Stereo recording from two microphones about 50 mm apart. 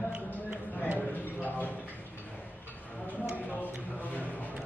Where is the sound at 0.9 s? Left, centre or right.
Left.